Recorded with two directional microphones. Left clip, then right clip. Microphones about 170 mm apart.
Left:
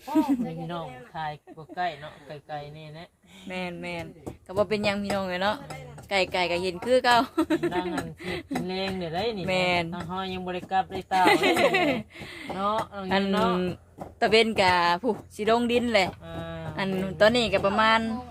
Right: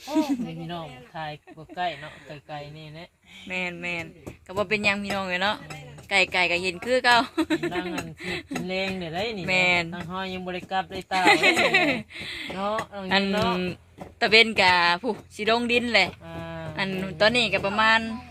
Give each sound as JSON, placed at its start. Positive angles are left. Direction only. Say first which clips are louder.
{"t": 0.1, "sound": "speech", "louder": "left 1 dB", "side_deg": 10}
{"t": 1.1, "sound": "speech", "louder": "left 1 dB", "side_deg": -30}
{"t": 3.5, "sound": "speech", "louder": "right 4 dB", "side_deg": 0}
{"t": 8.6, "sound": "speech", "louder": "right 5 dB", "side_deg": -30}
{"t": 9.5, "sound": "speech", "louder": "right 4 dB", "side_deg": 0}
{"t": 9.9, "sound": "speech", "louder": "even", "side_deg": -30}
{"t": 11.1, "sound": "speech", "louder": "right 2 dB", "side_deg": 0}
{"t": 13.3, "sound": "speech", "louder": "even", "side_deg": -40}
{"t": 14.2, "sound": "speech", "louder": "right 3 dB", "side_deg": 5}
{"t": 16.3, "sound": "a sound", "louder": "right 1 dB", "side_deg": -50}
{"t": 16.7, "sound": "speech", "louder": "left 1 dB", "side_deg": 10}